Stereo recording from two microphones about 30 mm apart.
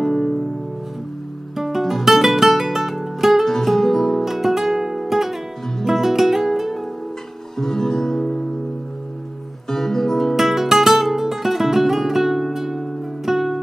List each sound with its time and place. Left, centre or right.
0.0 s music: centre
1.6 s music: centre
3.4 s music: centre
4.2 s music: centre
7.5 s music: centre
9.7 s music: centre
10.1 s guitar: centre